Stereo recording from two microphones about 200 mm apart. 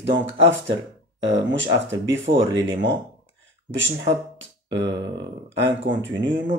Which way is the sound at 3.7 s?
65° right (ahead or behind).